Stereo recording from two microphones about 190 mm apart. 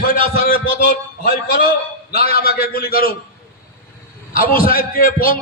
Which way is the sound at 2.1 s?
55° left (ahead or behind).